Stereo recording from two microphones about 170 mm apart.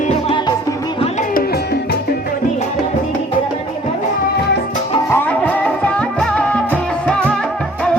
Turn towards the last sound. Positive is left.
turn(degrees=5)  # may be behind; listen again after turning